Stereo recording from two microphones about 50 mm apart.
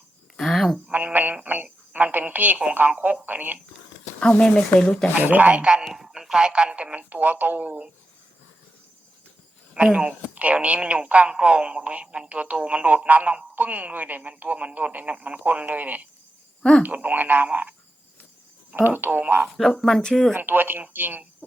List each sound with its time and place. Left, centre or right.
0.3 s a sound: centre
0.9 s a woman's voice: right
4.2 s speech: centre
5.1 s a woman's voice: right
5.5 s speech: centre
5.9 s speech: centre; by 7.9 s right
9.7 s a woman's voice: right
18.8 s a woman's voice: right
19.5 s speech: centre
20.3 s a woman's voice: right